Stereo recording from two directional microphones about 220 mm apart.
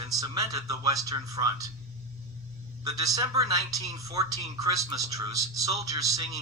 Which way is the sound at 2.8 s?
15° right (ahead or behind).